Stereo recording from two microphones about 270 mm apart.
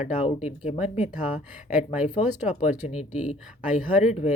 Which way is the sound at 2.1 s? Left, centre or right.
Left.